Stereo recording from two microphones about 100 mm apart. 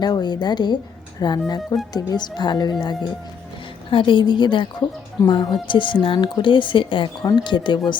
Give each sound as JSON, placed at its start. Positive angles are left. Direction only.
{"t": 0.0, "sound": "speech", "side_deg": 45}
{"t": 3.8, "sound": "speech", "side_deg": 55}